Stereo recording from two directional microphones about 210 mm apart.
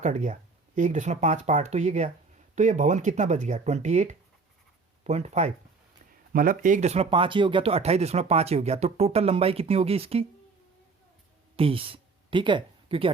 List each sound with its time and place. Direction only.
0.0 s speech: 35° right (ahead or behind)
11.5 s speech: 25° right (ahead or behind)